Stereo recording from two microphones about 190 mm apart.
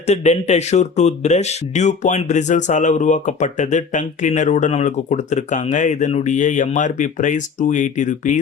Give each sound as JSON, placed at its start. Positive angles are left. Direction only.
{"t": 0.1, "sound": "speech", "side_deg": 35}